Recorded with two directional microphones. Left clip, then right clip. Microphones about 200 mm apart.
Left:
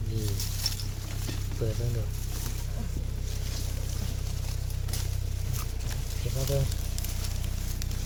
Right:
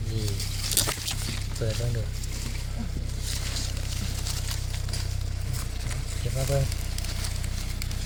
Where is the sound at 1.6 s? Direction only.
5° right (ahead or behind).